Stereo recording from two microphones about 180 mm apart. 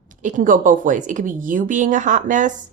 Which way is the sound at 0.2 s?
45° right (ahead or behind).